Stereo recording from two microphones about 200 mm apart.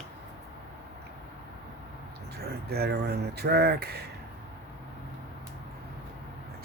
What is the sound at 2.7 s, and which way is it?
Speech, 55° right (ahead or behind).